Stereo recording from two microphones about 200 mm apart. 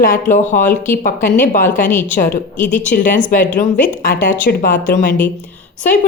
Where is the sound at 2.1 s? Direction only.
45° left (ahead or behind).